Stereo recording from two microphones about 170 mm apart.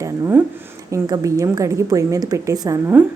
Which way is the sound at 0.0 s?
15° right (ahead or behind).